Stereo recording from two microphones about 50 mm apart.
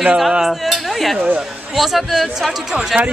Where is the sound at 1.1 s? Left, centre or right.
Right.